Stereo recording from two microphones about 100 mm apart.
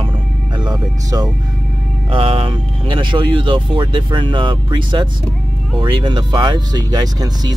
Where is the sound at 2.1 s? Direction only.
65° right (ahead or behind); by 7.5 s 45° right (ahead or behind).